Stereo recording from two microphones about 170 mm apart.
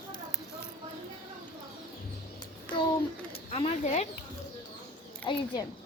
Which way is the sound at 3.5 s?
40° left (ahead or behind).